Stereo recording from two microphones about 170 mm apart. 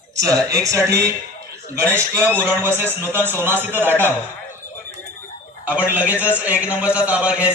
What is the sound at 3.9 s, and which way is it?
Speech, 10° left (ahead or behind).